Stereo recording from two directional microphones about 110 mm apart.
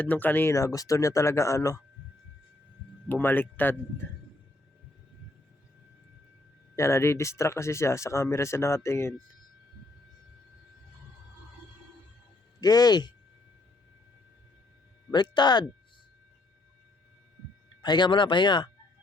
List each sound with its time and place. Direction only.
0.0 s speech: 15° left (ahead or behind)
0.5 s speech: 30° left (ahead or behind)
3.1 s speech: 20° left (ahead or behind)
6.7 s speech: 25° left (ahead or behind)
12.5 s speech: 35° left (ahead or behind)
15.1 s speech: 40° left (ahead or behind)
17.8 s speech: 45° left (ahead or behind)